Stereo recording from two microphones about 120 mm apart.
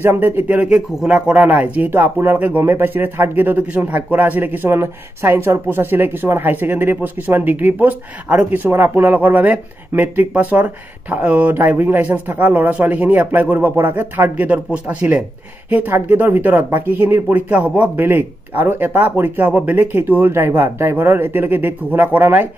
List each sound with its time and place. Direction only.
0.0 s speech: 15° right (ahead or behind)